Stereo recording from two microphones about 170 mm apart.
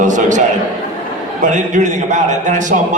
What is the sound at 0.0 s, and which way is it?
A man's voice, 50° right (ahead or behind).